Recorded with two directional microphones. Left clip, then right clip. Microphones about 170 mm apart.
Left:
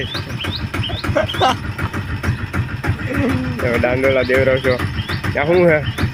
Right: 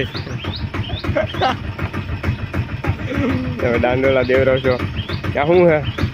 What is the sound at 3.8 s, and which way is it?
Speech, 10° right (ahead or behind).